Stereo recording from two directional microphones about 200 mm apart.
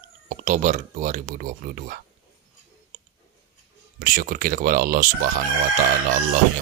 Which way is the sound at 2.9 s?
35° right (ahead or behind).